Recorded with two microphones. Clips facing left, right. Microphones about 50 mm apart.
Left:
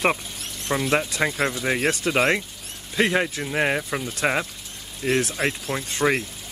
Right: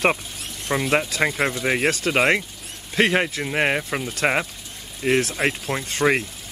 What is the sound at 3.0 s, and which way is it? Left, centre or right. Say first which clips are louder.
Speech: right 2 dB; right.